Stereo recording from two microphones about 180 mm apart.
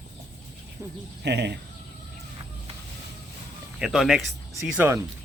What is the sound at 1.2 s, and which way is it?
Speech, 70° right (ahead or behind).